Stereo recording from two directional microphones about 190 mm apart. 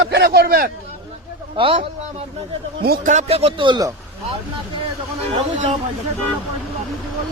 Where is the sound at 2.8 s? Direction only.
55° right (ahead or behind).